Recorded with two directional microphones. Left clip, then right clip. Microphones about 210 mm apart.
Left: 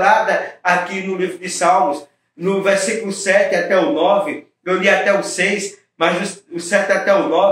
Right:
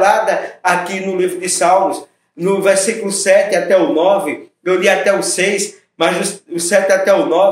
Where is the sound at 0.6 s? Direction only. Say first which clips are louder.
Right 2 dB; 50° right (ahead or behind).